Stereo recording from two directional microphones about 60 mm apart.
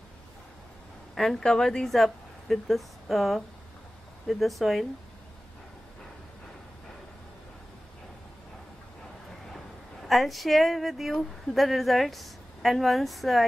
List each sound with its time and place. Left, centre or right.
1.1 s a woman's voice: centre
10.0 s speech: centre